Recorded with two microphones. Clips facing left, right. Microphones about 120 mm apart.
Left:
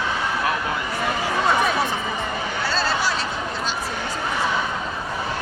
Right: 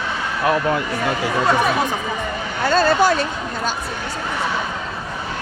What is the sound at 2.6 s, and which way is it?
Speech, 50° right (ahead or behind).